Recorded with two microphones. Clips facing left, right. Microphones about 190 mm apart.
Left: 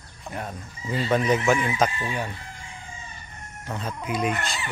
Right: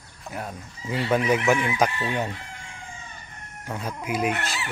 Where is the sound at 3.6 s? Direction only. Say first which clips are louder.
Even; 10° right (ahead or behind).